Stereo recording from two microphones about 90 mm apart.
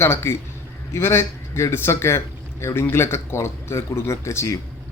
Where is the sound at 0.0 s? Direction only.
30° left (ahead or behind).